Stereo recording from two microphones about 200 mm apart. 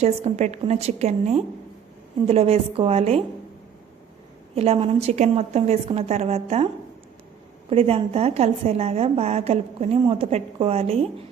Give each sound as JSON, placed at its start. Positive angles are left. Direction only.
{"t": 0.0, "sound": "a woman's voice", "side_deg": -30}
{"t": 4.5, "sound": "a woman's voice", "side_deg": -30}
{"t": 7.7, "sound": "a woman's voice", "side_deg": -30}